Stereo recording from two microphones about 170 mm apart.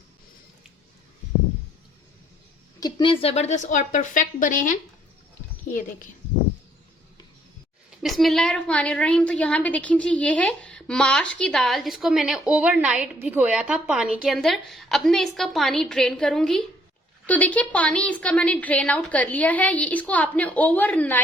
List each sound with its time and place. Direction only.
2.8 s a woman's voice: 30° left (ahead or behind); by 4.7 s 50° left (ahead or behind)
7.9 s a woman's voice: centre (ahead or behind)